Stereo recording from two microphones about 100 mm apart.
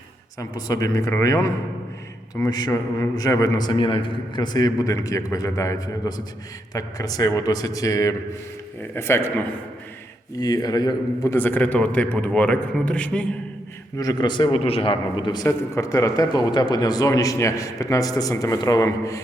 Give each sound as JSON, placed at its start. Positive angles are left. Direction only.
{"t": 0.3, "sound": "a man's voice", "side_deg": 35}
{"t": 10.4, "sound": "speech", "side_deg": 40}
{"t": 11.3, "sound": "a man's voice", "side_deg": 20}
{"t": 13.9, "sound": "a man's voice", "side_deg": 40}
{"t": 14.6, "sound": "a man's voice", "side_deg": 70}
{"t": 15.4, "sound": "speech", "side_deg": 30}